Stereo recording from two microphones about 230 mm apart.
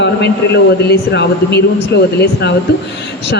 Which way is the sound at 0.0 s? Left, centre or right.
Left.